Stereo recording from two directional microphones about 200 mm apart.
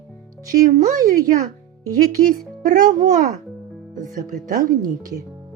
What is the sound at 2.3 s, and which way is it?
Speech, 40° right (ahead or behind).